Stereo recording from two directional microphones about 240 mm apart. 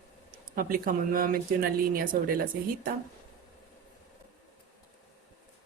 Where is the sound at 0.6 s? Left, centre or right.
Right.